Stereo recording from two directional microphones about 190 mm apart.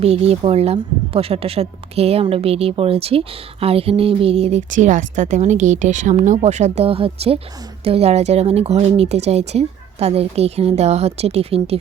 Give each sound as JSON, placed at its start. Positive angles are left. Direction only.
{"t": 0.0, "sound": "a woman's voice", "side_deg": -30}